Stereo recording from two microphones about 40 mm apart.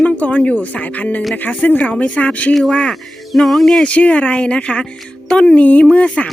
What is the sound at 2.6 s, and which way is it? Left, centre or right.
Speech, centre.